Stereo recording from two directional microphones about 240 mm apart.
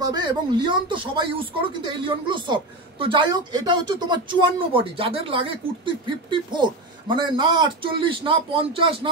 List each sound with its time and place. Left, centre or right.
0.0 s a woman's voice: centre